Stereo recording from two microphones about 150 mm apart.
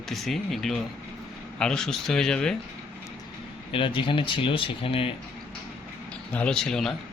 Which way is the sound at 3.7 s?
35° left (ahead or behind).